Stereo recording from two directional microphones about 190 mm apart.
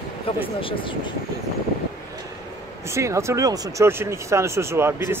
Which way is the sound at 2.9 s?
15° right (ahead or behind).